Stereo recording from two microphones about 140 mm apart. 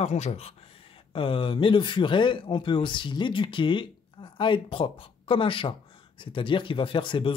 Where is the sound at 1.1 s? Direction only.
40° left (ahead or behind).